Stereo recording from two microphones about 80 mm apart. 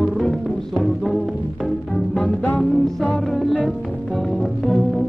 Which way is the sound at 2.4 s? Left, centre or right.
Centre.